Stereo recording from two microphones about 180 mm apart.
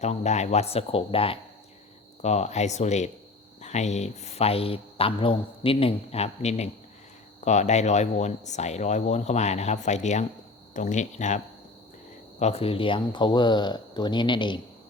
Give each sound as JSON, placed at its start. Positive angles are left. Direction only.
{"t": 0.0, "sound": "speech", "side_deg": 40}
{"t": 12.4, "sound": "speech", "side_deg": 35}